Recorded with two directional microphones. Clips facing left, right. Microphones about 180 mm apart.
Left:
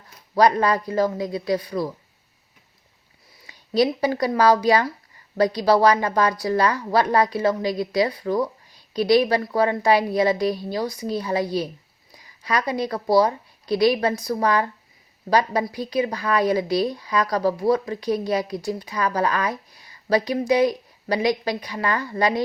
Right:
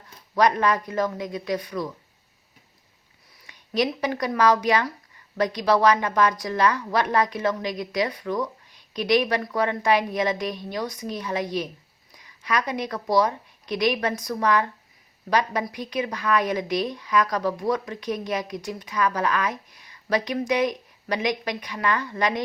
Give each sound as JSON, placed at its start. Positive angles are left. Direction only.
{"t": 0.3, "sound": "a woman's voice", "side_deg": 35}
{"t": 3.4, "sound": "a woman's voice", "side_deg": 30}